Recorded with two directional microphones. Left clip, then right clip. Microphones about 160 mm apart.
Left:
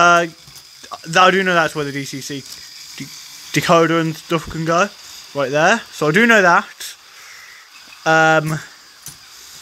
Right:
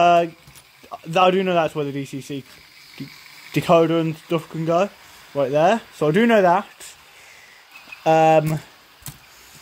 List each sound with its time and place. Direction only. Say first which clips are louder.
0.0 s speech: left 3 dB; centre (ahead or behind)
3.5 s speech: left 3 dB; 5° left (ahead or behind)
8.0 s speech: left 2 dB; 5° right (ahead or behind)